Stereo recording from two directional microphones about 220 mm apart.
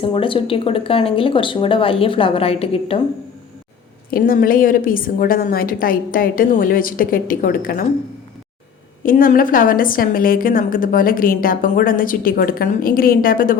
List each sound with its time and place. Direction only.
0.0 s speech: 25° left (ahead or behind)
4.1 s a woman's voice: 40° left (ahead or behind)
9.0 s a woman's voice: 40° left (ahead or behind)